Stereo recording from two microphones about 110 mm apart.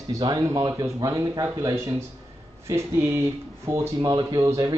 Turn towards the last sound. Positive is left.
turn(degrees=-35)  # may be behind; listen again after turning